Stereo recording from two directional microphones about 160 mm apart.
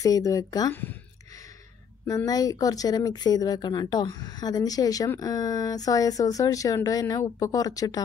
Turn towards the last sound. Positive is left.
turn(degrees=20)  # may be behind; listen again after turning